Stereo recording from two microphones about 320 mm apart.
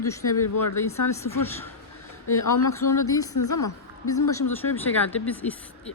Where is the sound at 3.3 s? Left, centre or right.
Left.